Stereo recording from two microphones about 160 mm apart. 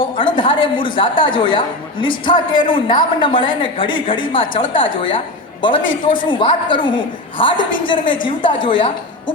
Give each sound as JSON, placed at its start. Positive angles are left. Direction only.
{"t": 0.2, "sound": "speech", "side_deg": 30}